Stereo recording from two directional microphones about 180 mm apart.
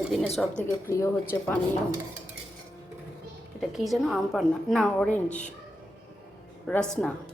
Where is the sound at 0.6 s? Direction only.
15° left (ahead or behind).